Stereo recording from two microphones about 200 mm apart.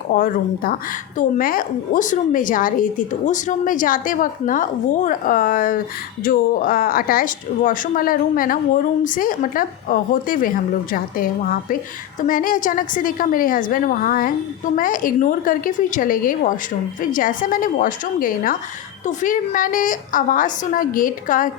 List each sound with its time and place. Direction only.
0.1 s a woman's voice: 45° left (ahead or behind)